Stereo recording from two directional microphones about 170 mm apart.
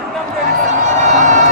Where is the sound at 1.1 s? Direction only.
45° right (ahead or behind).